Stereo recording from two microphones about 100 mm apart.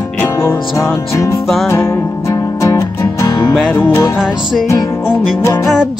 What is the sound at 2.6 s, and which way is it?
Music, 35° left (ahead or behind).